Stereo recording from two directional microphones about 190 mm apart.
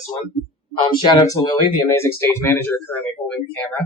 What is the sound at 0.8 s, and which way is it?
Speech, 25° left (ahead or behind).